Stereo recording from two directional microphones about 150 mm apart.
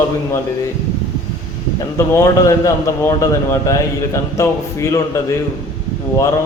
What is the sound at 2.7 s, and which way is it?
A man's voice, 20° left (ahead or behind).